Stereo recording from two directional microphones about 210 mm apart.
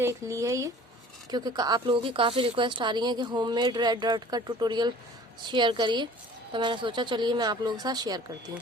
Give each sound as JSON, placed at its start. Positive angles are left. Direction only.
{"t": 0.0, "sound": "speech", "side_deg": -15}